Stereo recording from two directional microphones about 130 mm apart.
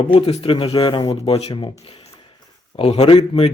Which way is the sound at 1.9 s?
50° left (ahead or behind).